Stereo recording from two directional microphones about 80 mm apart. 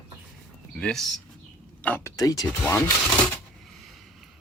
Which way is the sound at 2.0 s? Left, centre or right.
Left.